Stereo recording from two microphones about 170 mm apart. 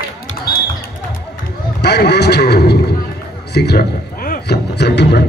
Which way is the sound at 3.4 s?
75° left (ahead or behind).